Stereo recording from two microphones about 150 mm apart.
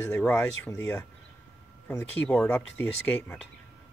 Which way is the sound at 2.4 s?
15° left (ahead or behind).